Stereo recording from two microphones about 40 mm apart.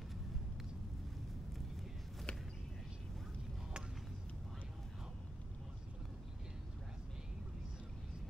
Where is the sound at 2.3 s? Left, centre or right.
Left.